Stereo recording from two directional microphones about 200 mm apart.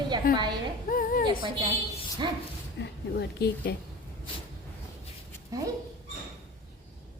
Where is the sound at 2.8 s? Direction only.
55° left (ahead or behind).